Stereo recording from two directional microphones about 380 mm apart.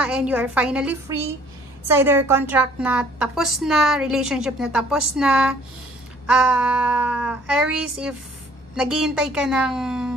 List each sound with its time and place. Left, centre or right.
0.0 s a woman's voice: centre